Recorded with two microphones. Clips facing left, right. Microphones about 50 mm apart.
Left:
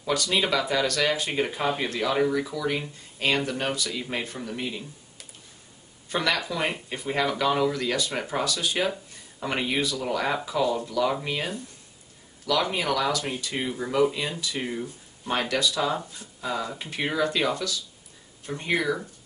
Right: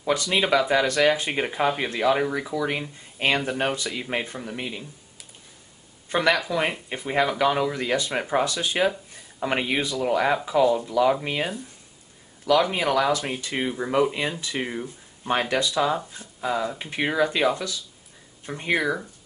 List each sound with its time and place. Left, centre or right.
0.0 s speech: right
1.4 s speech: centre
6.0 s speech: right
12.7 s speech: right